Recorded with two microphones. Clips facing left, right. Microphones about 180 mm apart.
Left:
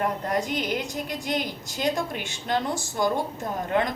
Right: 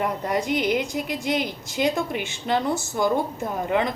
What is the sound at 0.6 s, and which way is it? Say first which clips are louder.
Speech: right 5 dB; 75° right (ahead or behind).